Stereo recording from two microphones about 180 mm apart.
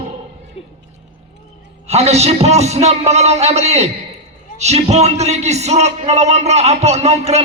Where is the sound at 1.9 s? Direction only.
35° right (ahead or behind).